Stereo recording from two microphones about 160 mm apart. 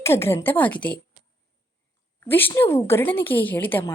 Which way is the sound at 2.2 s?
15° left (ahead or behind).